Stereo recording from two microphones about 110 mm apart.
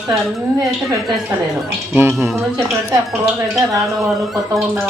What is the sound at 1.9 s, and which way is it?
Speech, 20° right (ahead or behind).